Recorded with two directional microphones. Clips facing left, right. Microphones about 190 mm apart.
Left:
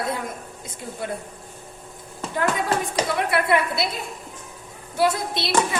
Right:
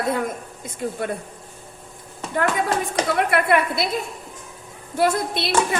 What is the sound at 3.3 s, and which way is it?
Speech, 50° right (ahead or behind).